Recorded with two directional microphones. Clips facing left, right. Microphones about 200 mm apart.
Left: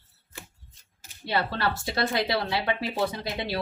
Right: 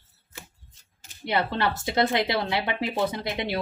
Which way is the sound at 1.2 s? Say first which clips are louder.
Right 2 dB; 20° right (ahead or behind).